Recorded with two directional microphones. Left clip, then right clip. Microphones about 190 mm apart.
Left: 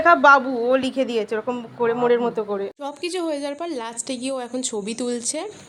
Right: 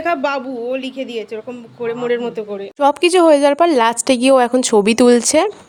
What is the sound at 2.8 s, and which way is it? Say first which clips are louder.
Speech: right 16 dB; 45° right (ahead or behind).